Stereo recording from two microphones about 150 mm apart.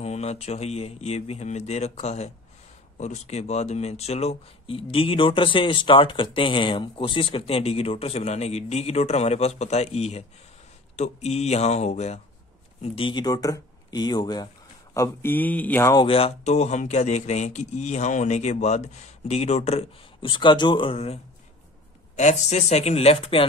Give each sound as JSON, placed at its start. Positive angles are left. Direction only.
{"t": 0.0, "sound": "speech", "side_deg": 45}
{"t": 15.0, "sound": "speech", "side_deg": 15}
{"t": 16.0, "sound": "speech", "side_deg": 40}
{"t": 22.1, "sound": "speech", "side_deg": 50}